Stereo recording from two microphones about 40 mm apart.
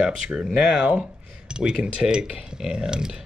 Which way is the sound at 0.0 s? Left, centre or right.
Right.